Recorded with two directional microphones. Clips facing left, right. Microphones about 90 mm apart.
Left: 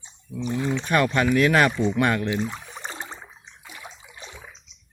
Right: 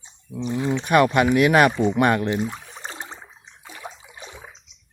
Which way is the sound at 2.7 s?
Centre (ahead or behind).